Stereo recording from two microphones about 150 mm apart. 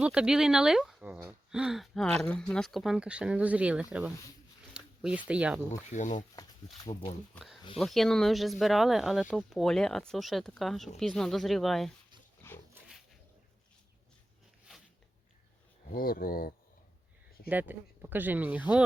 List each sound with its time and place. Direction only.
0.0 s speech: 5° right (ahead or behind)
4.7 s a sound: 5° right (ahead or behind)
5.3 s speech: 10° right (ahead or behind)
5.9 s speech: 55° left (ahead or behind)
7.3 s speech: centre (ahead or behind)
15.9 s speech: 75° left (ahead or behind)
17.5 s speech: 10° right (ahead or behind)